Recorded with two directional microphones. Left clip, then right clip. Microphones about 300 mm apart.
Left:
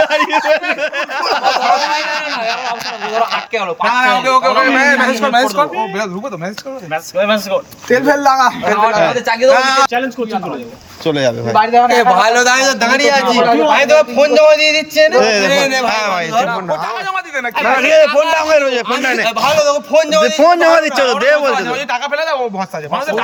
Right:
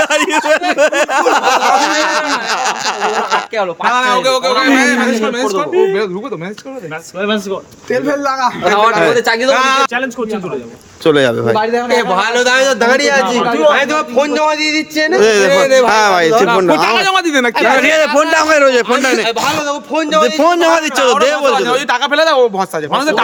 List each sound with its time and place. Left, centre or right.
0.0 s a sound: centre
3.9 s a man's voice: centre
7.9 s a man's voice: centre
8.7 s speech: centre
9.6 s a man's voice: centre
11.0 s a man's voice: centre
17.0 s speech: right
17.7 s a man's voice: centre
21.5 s speech: centre